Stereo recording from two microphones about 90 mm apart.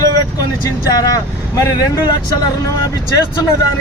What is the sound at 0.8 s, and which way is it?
Speech, 45° left (ahead or behind).